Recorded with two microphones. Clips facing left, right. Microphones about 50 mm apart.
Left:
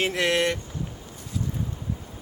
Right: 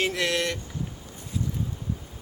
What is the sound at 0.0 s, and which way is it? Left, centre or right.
Speech, left.